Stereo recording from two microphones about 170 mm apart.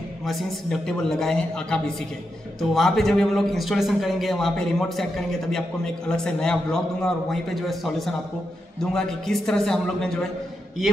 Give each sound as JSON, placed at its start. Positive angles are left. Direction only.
{"t": 0.2, "sound": "a man's voice", "side_deg": 0}